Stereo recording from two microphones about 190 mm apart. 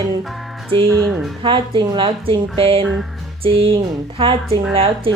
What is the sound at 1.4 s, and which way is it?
A woman's voice, 25° right (ahead or behind).